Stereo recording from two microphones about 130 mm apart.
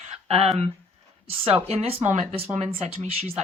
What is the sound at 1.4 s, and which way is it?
Speech, 50° right (ahead or behind).